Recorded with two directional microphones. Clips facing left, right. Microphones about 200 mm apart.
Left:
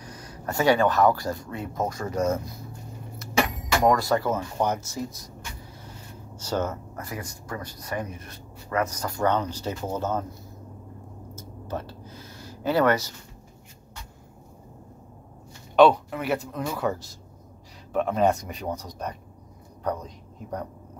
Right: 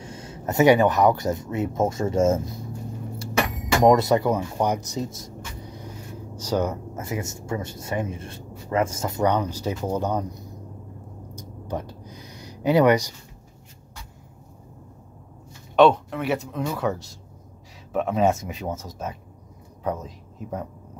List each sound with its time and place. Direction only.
0.0 s speech: 25° right (ahead or behind)
3.8 s speech: 20° right (ahead or behind)
5.6 s vehicle: 20° right (ahead or behind)
6.3 s speech: 10° right (ahead or behind)
11.3 s a sound: 15° right (ahead or behind)
15.7 s speech: centre (ahead or behind)